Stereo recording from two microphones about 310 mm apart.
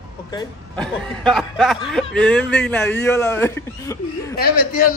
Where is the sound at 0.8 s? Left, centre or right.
Centre.